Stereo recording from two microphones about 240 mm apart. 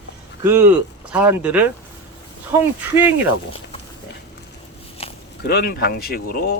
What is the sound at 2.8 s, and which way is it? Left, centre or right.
Speech, centre.